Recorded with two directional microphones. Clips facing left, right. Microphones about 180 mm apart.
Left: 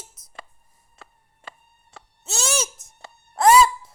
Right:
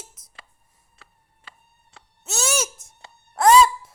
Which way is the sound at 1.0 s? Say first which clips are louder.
Left 7 dB; 50° left (ahead or behind).